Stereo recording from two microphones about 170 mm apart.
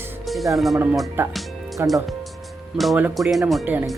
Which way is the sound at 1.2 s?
15° right (ahead or behind).